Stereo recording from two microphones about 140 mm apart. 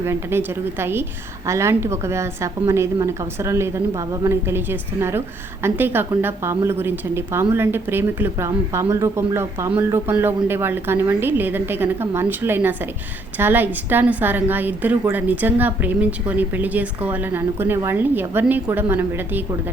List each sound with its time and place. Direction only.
0.0 s a woman's voice: 20° right (ahead or behind)